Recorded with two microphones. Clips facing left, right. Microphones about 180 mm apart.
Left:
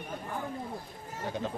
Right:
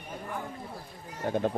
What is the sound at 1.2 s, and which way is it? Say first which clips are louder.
Speech: right 7 dB; 55° right (ahead or behind).